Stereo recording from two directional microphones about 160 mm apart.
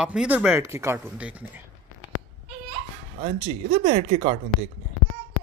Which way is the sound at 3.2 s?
30° right (ahead or behind).